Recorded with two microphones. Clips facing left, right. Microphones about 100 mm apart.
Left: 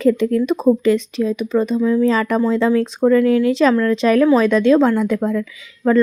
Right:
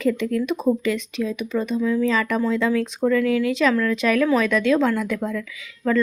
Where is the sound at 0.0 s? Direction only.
35° left (ahead or behind).